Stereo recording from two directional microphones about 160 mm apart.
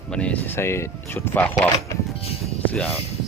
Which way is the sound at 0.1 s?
5° left (ahead or behind).